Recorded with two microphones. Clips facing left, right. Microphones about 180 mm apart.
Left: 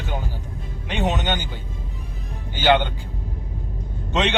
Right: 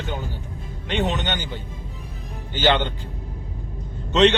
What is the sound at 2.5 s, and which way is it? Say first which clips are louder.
Speech: left 2 dB; 10° left (ahead or behind).